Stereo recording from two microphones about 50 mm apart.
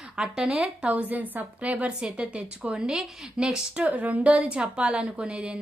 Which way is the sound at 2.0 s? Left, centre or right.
Centre.